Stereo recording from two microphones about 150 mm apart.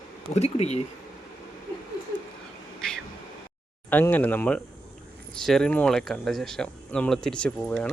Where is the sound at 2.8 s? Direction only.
5° left (ahead or behind).